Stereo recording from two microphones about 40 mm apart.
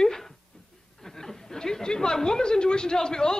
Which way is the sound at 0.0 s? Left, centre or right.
Centre.